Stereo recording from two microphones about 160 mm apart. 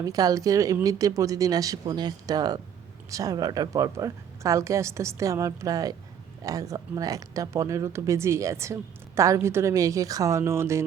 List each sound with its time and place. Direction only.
0.0 s speech: 25° right (ahead or behind)